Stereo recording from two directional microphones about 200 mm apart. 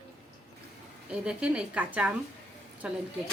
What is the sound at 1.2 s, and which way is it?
A woman's voice, 5° right (ahead or behind).